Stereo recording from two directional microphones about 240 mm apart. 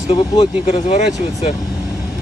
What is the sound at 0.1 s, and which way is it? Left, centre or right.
Speech, left.